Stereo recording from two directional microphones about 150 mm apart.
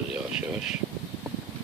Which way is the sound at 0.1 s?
5° right (ahead or behind).